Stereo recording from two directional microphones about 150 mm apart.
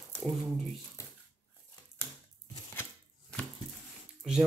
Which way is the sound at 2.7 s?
10° left (ahead or behind).